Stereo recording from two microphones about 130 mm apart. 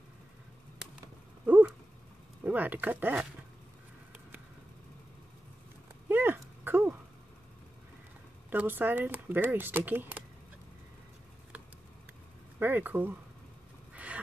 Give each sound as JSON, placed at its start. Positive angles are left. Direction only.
{"t": 1.4, "sound": "cat", "side_deg": -10}
{"t": 2.4, "sound": "speech", "side_deg": -15}
{"t": 6.0, "sound": "dog", "side_deg": -15}
{"t": 8.5, "sound": "speech", "side_deg": -15}
{"t": 12.5, "sound": "speech", "side_deg": -15}
{"t": 13.9, "sound": "a sound", "side_deg": -10}